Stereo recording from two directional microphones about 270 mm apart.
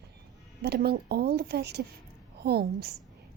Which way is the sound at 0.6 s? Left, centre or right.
Right.